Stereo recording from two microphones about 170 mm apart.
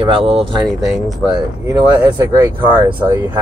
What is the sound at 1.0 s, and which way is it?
Speech, 25° right (ahead or behind).